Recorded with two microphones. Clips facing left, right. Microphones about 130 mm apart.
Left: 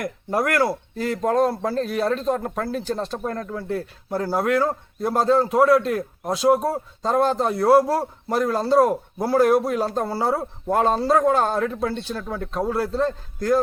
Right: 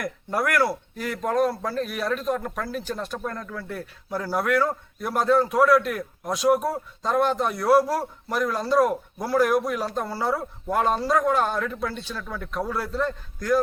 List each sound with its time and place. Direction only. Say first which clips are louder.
0.0 s a man's voice: left 3 dB; 25° left (ahead or behind)